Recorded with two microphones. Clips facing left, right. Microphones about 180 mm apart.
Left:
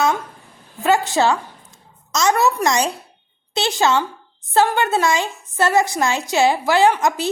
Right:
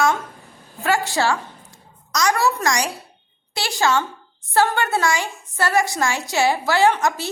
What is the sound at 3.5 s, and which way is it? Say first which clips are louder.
A woman's voice: left 3 dB; 20° left (ahead or behind).